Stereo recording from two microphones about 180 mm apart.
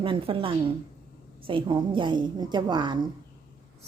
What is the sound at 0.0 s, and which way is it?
A woman's voice, 30° right (ahead or behind).